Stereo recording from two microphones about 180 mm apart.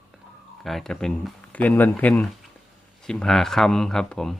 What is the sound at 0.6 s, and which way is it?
Speech, centre (ahead or behind).